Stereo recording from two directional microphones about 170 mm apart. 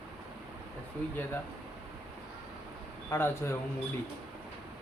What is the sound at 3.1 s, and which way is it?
Speech, 15° left (ahead or behind).